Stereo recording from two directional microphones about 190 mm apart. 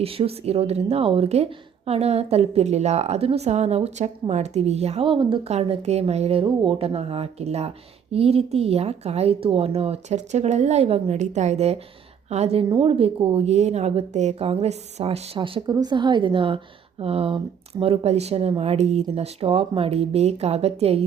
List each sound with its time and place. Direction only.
0.0 s a woman's voice: 30° right (ahead or behind)